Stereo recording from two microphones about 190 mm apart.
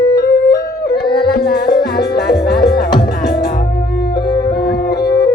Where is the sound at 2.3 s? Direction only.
60° left (ahead or behind).